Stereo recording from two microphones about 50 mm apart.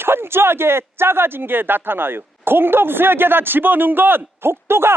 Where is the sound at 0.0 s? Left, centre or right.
Right.